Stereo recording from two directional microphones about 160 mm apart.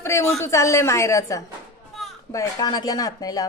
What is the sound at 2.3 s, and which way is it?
Speech, 20° left (ahead or behind).